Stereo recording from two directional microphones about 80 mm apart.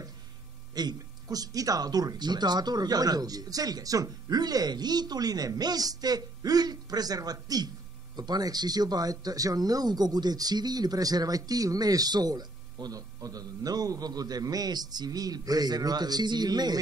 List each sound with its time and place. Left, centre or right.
0.7 s speech: right